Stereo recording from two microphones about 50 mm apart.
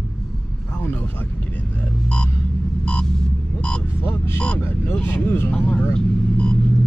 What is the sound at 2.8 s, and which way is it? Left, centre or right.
Throbbing, left.